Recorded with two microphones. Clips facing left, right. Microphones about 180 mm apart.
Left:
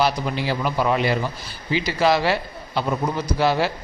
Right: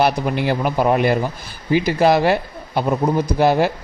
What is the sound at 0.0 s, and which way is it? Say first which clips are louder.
Speech: right 4 dB; 55° right (ahead or behind).